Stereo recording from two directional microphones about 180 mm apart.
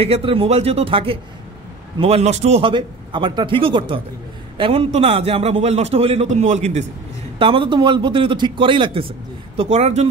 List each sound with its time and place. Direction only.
0.0 s a man's voice: 30° right (ahead or behind)
7.3 s a man's voice: 30° right (ahead or behind)